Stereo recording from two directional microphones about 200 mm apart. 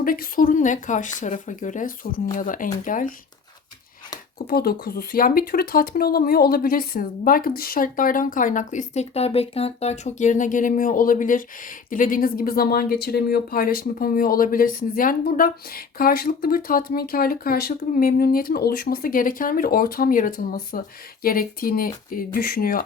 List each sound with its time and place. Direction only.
0.0 s speech: 45° left (ahead or behind)
4.4 s speech: 50° left (ahead or behind)